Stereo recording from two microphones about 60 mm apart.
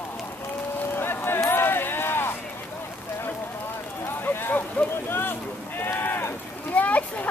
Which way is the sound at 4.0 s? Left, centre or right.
Left.